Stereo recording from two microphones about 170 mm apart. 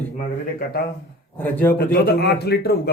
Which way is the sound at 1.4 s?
10° left (ahead or behind).